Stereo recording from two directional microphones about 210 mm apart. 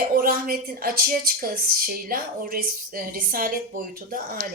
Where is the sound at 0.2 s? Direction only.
45° right (ahead or behind).